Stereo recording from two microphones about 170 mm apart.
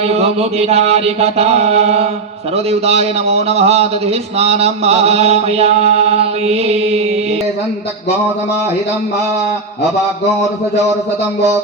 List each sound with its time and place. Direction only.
0.0 s speech: 35° right (ahead or behind)